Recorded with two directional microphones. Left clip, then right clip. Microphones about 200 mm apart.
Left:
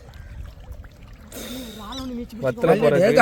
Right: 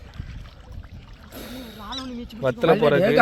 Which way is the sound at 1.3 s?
15° left (ahead or behind).